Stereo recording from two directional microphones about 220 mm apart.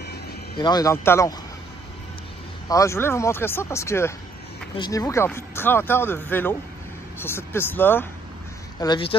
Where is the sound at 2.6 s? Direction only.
15° left (ahead or behind).